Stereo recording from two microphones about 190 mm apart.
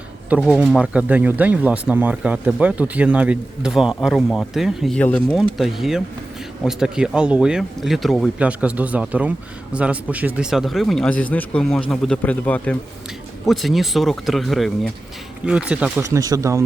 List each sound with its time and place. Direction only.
0.3 s speech: 5° right (ahead or behind)
16.1 s speech: 15° right (ahead or behind)